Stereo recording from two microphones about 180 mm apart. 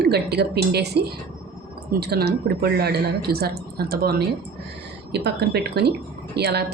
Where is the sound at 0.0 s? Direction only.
65° right (ahead or behind).